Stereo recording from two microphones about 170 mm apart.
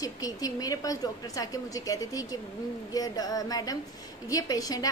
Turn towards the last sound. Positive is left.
turn(degrees=20)  # may be behind; listen again after turning